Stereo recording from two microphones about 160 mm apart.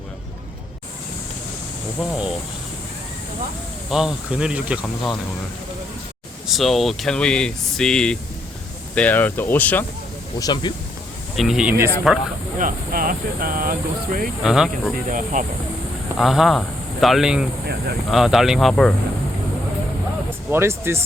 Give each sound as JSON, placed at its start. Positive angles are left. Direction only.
{"t": 2.0, "sound": "speech", "side_deg": -5}
{"t": 3.8, "sound": "speech", "side_deg": -5}
{"t": 6.5, "sound": "speech", "side_deg": 0}
{"t": 10.3, "sound": "speech", "side_deg": 25}
{"t": 11.3, "sound": "speech", "side_deg": -5}
{"t": 12.5, "sound": "speech", "side_deg": -60}
{"t": 14.4, "sound": "speech", "side_deg": -5}
{"t": 14.9, "sound": "speech", "side_deg": -55}
{"t": 16.1, "sound": "speech", "side_deg": 0}
{"t": 20.5, "sound": "speech", "side_deg": -15}